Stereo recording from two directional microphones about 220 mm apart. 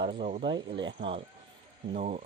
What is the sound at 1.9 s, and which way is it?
Speech, 35° right (ahead or behind).